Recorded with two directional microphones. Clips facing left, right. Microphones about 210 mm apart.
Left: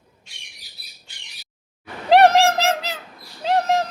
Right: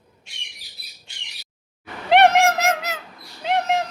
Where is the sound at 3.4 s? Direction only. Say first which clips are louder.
Left 2 dB; 35° left (ahead or behind).